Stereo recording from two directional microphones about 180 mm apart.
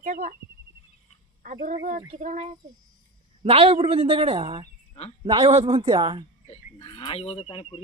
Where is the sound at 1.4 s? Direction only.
45° right (ahead or behind).